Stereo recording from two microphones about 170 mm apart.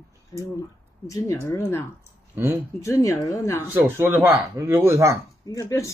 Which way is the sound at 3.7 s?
15° right (ahead or behind).